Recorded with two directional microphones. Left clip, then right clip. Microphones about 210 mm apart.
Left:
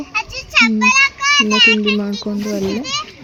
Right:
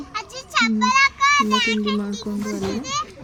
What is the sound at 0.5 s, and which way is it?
A child's voice, 25° left (ahead or behind).